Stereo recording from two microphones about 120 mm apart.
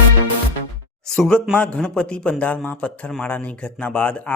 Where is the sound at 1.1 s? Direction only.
5° left (ahead or behind).